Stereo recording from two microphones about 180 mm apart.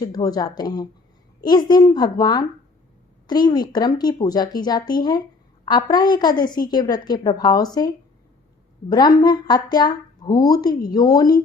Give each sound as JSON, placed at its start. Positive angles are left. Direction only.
{"t": 0.1, "sound": "a woman's voice", "side_deg": 20}